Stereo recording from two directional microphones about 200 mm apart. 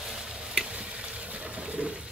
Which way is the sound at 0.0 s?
Centre (ahead or behind).